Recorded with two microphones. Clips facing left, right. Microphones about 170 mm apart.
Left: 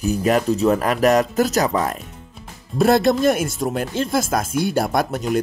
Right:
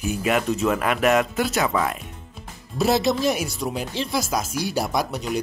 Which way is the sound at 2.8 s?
55° left (ahead or behind).